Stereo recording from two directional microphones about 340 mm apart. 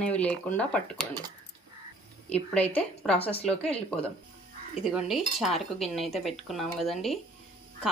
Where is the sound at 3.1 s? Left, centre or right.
Centre.